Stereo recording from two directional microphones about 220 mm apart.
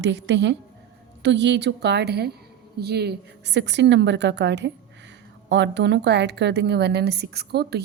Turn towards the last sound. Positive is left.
turn(degrees=-45)  # may be behind; listen again after turning